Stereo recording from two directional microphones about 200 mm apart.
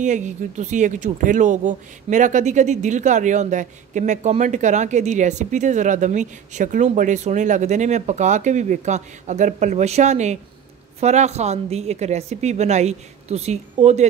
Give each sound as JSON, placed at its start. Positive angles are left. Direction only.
{"t": 0.0, "sound": "speech", "side_deg": -35}